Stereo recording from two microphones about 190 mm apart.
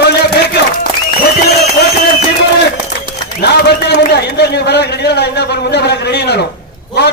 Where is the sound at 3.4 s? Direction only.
60° left (ahead or behind).